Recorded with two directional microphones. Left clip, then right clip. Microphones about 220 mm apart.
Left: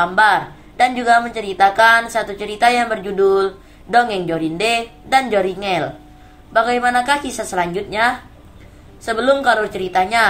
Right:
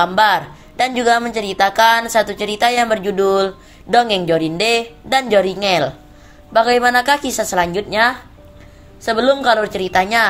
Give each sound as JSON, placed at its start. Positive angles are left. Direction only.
{"t": 0.0, "sound": "a woman's voice", "side_deg": -40}